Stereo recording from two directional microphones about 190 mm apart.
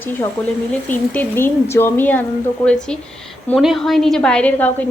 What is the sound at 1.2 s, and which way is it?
Speech, 10° left (ahead or behind).